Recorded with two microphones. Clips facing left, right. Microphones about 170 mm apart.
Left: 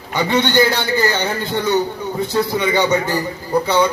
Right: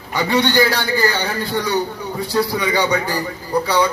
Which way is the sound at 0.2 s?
20° left (ahead or behind).